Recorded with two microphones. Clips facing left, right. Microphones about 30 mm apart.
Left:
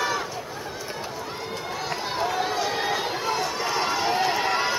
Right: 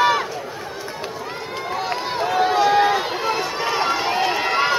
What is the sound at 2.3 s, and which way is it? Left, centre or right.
Run, right.